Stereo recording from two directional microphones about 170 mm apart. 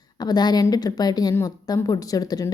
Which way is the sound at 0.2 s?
25° left (ahead or behind).